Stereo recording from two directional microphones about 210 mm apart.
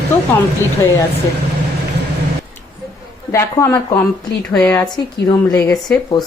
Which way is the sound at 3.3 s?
10° left (ahead or behind).